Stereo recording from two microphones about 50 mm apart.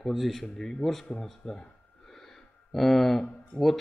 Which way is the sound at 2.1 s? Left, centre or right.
Centre.